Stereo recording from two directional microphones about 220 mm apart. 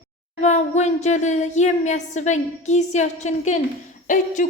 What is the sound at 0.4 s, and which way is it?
Speech, 30° left (ahead or behind).